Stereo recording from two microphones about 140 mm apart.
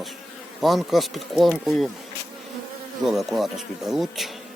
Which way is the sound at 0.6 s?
Centre (ahead or behind).